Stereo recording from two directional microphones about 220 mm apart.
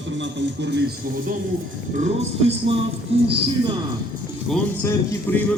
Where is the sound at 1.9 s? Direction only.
30° right (ahead or behind).